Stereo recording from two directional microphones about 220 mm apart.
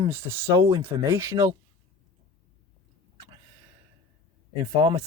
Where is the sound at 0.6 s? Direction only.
25° right (ahead or behind).